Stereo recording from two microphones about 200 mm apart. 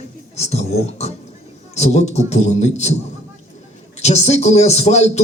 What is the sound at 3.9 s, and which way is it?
Speech, 35° left (ahead or behind).